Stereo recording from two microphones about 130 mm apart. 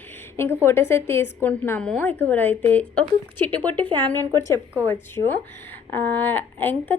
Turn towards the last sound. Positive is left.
turn(degrees=15)  # may be behind; listen again after turning